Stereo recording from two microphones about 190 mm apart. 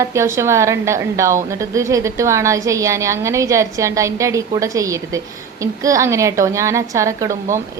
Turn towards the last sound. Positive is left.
turn(degrees=-15)  # may be behind; listen again after turning